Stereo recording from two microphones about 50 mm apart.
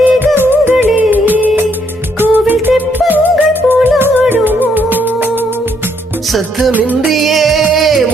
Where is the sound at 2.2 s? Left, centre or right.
Right.